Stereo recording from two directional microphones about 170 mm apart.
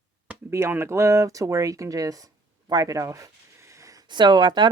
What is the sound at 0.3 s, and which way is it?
Speech, 15° right (ahead or behind).